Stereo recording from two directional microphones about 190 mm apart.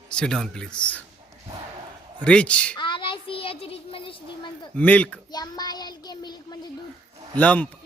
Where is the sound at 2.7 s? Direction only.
25° left (ahead or behind).